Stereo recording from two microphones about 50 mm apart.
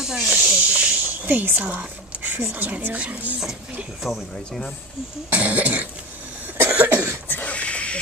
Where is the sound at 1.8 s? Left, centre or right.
Right.